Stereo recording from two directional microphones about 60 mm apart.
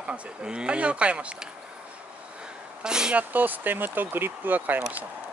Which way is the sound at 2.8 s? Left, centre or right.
Centre.